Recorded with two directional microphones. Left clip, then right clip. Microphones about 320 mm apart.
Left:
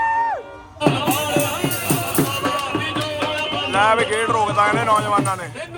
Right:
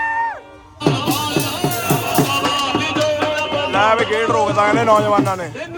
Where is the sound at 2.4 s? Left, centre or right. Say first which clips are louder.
Right 4 dB; right.